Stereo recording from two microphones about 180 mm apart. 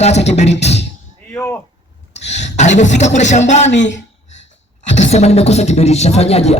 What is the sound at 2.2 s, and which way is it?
A man's voice, 40° left (ahead or behind).